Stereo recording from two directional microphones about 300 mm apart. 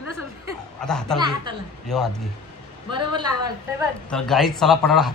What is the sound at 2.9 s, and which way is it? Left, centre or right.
A man's voice, centre.